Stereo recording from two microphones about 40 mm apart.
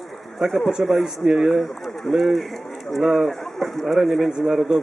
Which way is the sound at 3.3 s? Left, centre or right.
Centre.